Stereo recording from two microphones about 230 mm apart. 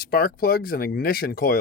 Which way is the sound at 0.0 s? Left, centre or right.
Left.